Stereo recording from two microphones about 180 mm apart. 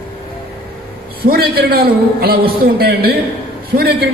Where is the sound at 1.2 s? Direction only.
55° right (ahead or behind).